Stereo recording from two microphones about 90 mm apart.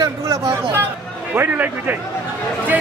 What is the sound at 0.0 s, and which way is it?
Speech, 35° right (ahead or behind).